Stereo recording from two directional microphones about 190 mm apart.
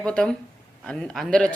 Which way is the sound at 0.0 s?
5° left (ahead or behind).